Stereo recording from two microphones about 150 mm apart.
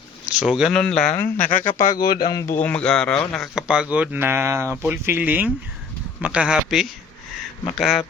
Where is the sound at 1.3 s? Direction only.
60° left (ahead or behind).